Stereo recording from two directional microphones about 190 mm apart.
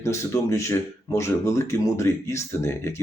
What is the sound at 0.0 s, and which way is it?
Speech, 15° left (ahead or behind).